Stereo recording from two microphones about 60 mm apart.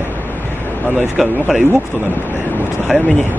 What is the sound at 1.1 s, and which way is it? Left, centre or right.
Speech, centre.